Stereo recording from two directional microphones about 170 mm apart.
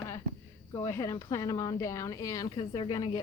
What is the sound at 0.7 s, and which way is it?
A woman's voice, 15° left (ahead or behind).